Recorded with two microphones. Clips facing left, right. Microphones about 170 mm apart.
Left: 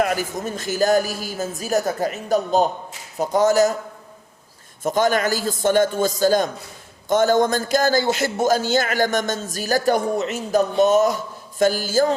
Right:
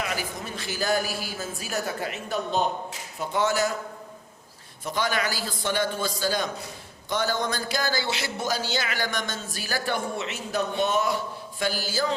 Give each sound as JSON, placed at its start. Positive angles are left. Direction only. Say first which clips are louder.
{"t": 0.0, "sound": "a man's voice", "louder": "left 9 dB", "side_deg": 45}
{"t": 4.8, "sound": "a man's voice", "louder": "left 8 dB", "side_deg": 45}